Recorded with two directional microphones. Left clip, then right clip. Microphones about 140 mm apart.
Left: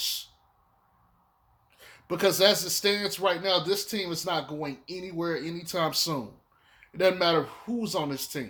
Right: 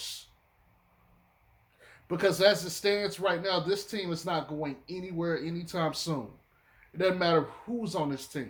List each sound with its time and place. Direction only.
1.8 s speech: 50° left (ahead or behind)